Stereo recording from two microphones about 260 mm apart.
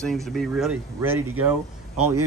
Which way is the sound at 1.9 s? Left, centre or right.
Right.